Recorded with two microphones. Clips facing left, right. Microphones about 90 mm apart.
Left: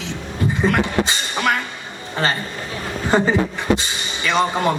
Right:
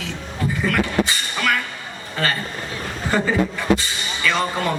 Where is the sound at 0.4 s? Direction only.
20° left (ahead or behind).